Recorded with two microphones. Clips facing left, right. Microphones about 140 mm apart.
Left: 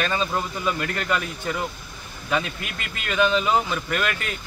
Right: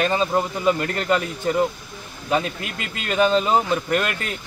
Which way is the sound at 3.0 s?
35° right (ahead or behind).